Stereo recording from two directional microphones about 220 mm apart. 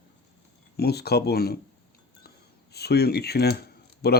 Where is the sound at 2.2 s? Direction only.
45° left (ahead or behind).